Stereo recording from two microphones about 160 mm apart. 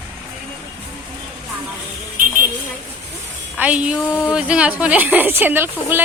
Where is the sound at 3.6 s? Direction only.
10° right (ahead or behind).